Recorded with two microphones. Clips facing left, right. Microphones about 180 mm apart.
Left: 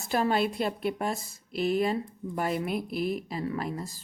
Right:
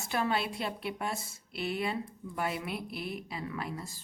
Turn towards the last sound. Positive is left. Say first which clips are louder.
# left 6 dB
turn(degrees=40)  # may be behind; listen again after turning